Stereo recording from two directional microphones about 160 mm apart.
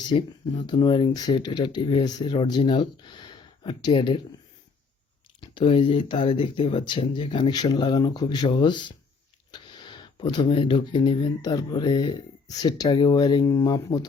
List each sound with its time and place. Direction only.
0.1 s speech: 30° left (ahead or behind)
5.5 s speech: 30° left (ahead or behind)
9.5 s a sound: 30° left (ahead or behind)
11.4 s speech: 25° left (ahead or behind)